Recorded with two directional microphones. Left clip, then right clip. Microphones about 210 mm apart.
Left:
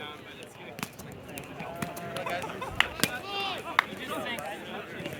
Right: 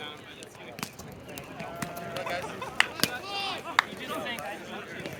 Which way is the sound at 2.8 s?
50° right (ahead or behind).